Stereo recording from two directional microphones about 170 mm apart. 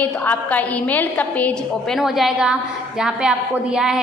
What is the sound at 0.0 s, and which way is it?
A woman's voice, 10° left (ahead or behind).